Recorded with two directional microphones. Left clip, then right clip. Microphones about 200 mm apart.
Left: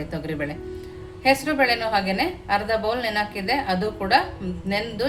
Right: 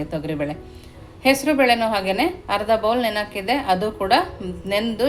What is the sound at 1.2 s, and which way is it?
A woman's voice, 30° right (ahead or behind).